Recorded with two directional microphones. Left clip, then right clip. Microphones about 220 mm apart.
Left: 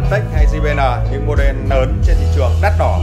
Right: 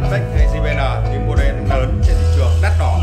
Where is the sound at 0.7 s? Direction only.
15° left (ahead or behind).